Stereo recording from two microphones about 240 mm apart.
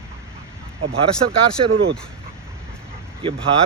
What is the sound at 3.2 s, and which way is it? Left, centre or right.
Speech, right.